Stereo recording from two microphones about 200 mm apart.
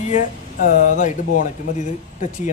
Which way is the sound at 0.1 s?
40° left (ahead or behind).